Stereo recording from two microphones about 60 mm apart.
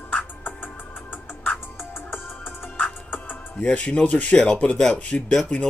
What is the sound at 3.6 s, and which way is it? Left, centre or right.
Speech, centre.